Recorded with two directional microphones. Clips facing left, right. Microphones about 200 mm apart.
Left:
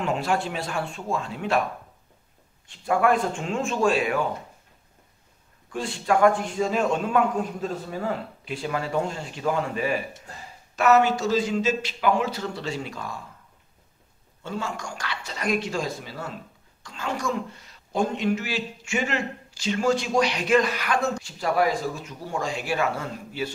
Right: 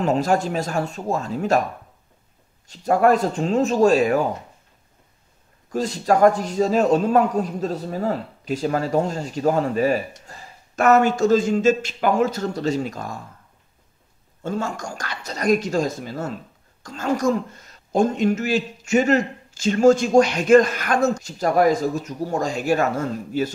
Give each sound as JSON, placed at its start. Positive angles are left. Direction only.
{"t": 0.0, "sound": "a man's voice", "side_deg": -40}
{"t": 2.7, "sound": "a man's voice", "side_deg": -40}
{"t": 5.7, "sound": "a man's voice", "side_deg": -40}
{"t": 14.4, "sound": "a woman's voice", "side_deg": -45}